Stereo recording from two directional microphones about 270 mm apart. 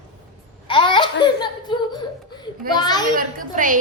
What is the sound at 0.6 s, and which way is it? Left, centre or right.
Babbling, centre.